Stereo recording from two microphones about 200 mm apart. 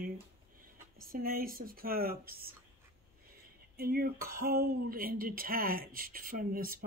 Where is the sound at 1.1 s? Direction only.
45° right (ahead or behind).